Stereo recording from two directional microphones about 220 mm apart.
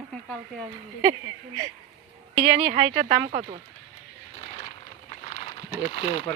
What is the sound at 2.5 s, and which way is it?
Speech, 30° right (ahead or behind).